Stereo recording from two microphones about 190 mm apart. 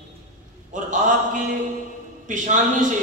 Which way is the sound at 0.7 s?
40° right (ahead or behind).